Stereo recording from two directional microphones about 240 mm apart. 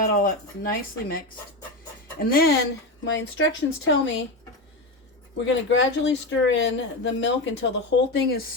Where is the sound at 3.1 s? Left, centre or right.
Left.